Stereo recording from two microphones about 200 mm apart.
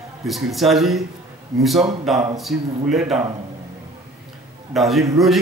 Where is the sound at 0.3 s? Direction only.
Centre (ahead or behind).